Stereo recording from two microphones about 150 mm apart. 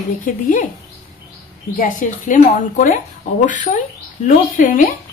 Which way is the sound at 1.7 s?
60° left (ahead or behind).